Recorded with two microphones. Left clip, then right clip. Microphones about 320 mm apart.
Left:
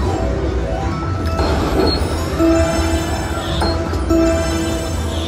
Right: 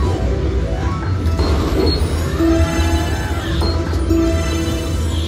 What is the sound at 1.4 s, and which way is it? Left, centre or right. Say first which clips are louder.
Music: left 2 dB; left.